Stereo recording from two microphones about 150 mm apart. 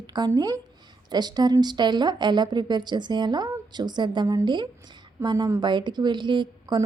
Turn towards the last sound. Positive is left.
turn(degrees=-30)  # may be behind; listen again after turning